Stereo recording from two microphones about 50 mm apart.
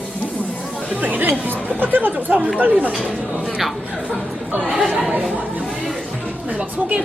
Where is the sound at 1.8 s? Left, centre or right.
Right.